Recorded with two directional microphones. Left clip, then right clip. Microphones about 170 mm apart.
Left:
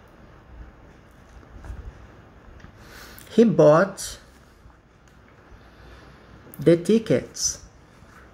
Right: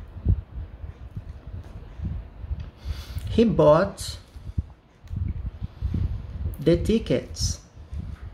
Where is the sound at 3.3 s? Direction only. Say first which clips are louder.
Left 2 dB; 20° left (ahead or behind).